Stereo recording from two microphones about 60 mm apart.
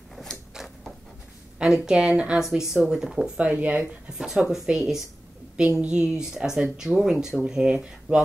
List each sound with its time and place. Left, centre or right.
0.1 s a sound: centre
1.6 s speech: centre
3.3 s speech: right
4.2 s speech: centre
5.8 s speech: centre